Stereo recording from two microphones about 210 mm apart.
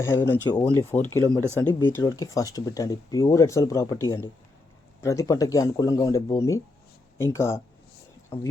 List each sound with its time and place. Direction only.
0.0 s speech: 10° left (ahead or behind)
1.2 s speech: 15° right (ahead or behind)
1.5 s speech: 10° left (ahead or behind)